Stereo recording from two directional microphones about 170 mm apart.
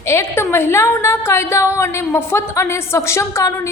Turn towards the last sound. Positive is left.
turn(degrees=15)  # may be behind; listen again after turning